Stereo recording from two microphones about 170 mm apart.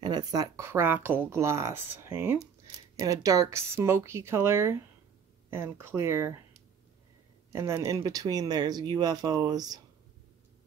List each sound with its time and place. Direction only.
0.0 s speech: 20° right (ahead or behind)
7.5 s speech: 15° right (ahead or behind)